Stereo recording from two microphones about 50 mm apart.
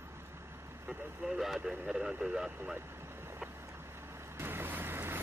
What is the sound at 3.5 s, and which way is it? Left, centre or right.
Vehicle, right.